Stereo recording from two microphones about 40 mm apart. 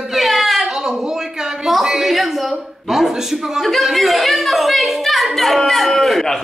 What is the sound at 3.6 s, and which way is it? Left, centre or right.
A woman's voice, centre.